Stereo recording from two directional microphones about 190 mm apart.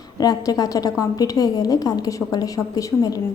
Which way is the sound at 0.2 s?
20° left (ahead or behind).